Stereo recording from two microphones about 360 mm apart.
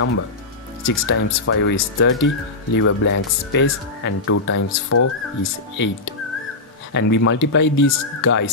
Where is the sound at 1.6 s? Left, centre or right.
Left.